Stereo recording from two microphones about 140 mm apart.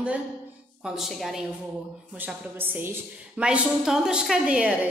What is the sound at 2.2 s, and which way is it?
A woman's voice, 15° right (ahead or behind).